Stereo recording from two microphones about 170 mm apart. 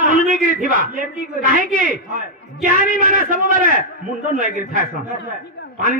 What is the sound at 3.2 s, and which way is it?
Speech, 50° right (ahead or behind).